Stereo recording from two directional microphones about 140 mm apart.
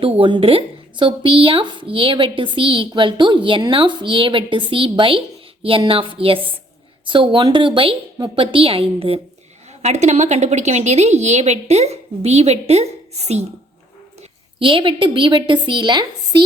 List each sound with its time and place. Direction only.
0.0 s speech: 40° right (ahead or behind)
9.8 s a woman's voice: 55° right (ahead or behind)
14.2 s a woman's voice: 40° right (ahead or behind)